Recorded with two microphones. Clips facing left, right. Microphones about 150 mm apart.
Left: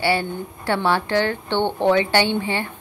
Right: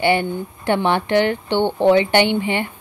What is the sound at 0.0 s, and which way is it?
Speech, 20° right (ahead or behind).